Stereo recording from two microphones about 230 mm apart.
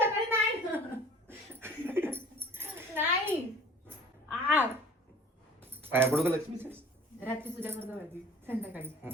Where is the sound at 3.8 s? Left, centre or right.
Centre.